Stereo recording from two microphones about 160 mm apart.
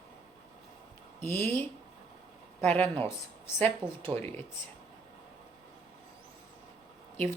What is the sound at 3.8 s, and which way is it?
Speech, 30° right (ahead or behind).